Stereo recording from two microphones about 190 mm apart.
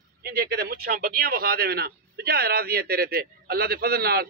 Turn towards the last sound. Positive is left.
turn(degrees=-55)  # may be behind; listen again after turning